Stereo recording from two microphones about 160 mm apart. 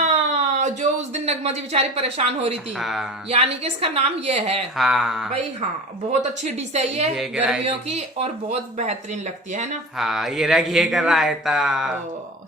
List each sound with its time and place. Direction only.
0.0 s speech: 50° right (ahead or behind)
2.7 s speech: centre (ahead or behind)
3.2 s a woman's voice: 40° right (ahead or behind)
4.8 s speech: centre (ahead or behind)
6.1 s a woman's voice: 45° right (ahead or behind)
7.2 s speech: 5° right (ahead or behind)
7.6 s a woman's voice: 40° right (ahead or behind)
10.0 s speech: centre (ahead or behind)